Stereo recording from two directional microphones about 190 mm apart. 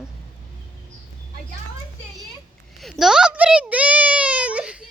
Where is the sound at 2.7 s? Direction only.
Centre (ahead or behind).